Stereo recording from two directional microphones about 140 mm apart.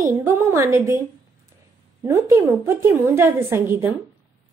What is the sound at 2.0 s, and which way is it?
A woman's voice, 20° right (ahead or behind).